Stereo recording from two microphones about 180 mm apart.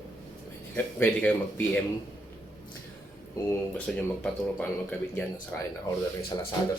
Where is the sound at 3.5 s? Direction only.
5° left (ahead or behind).